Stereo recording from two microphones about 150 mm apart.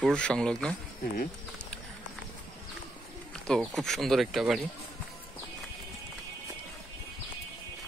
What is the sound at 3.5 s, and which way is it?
Speech, centre (ahead or behind).